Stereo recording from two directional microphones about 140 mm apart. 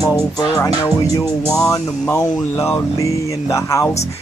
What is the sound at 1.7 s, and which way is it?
Speech, 25° left (ahead or behind).